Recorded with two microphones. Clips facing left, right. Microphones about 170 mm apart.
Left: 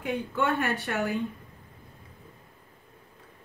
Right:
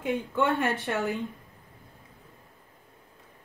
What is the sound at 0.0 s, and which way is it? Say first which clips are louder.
Speech: right 2 dB; 20° right (ahead or behind).